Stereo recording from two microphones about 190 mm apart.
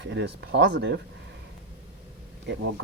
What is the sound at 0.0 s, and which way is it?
Speech, 65° right (ahead or behind).